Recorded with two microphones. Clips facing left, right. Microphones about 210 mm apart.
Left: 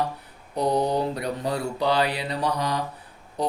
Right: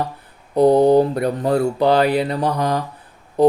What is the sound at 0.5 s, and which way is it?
Mantra, 55° right (ahead or behind).